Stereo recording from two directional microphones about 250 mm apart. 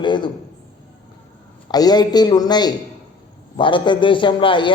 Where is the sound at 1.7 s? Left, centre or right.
Centre.